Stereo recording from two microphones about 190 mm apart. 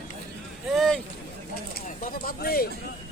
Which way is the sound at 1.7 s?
45° left (ahead or behind).